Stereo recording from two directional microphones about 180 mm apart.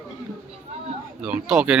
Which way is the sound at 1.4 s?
5° right (ahead or behind).